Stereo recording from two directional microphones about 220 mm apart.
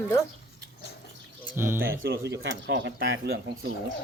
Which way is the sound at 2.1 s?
50° right (ahead or behind).